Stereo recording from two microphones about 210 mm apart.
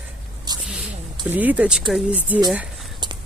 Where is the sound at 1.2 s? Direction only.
10° right (ahead or behind).